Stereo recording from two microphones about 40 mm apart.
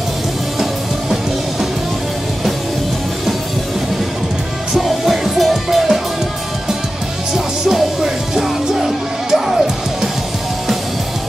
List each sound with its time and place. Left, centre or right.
4.8 s music: centre
7.3 s music: centre